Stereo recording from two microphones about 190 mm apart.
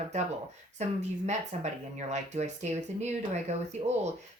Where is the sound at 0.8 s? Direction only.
35° right (ahead or behind).